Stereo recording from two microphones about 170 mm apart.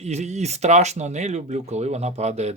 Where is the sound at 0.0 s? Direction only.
40° right (ahead or behind).